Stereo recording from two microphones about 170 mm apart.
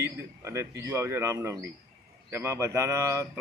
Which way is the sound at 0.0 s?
15° right (ahead or behind).